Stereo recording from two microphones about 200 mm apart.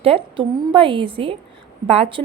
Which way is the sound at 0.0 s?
25° right (ahead or behind).